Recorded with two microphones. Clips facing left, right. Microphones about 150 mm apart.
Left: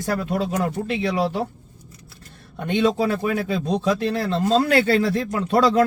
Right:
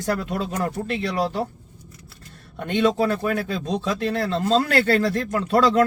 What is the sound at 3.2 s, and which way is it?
Speech, 20° left (ahead or behind).